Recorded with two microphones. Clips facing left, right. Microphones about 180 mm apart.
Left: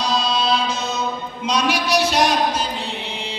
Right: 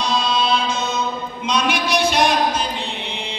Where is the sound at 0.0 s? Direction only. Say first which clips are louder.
Right 1 dB; 35° left (ahead or behind).